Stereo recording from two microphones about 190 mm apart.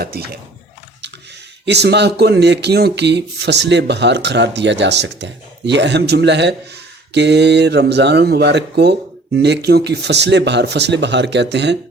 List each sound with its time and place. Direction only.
0.0 s speech: 55° right (ahead or behind)
1.6 s speech: 65° right (ahead or behind)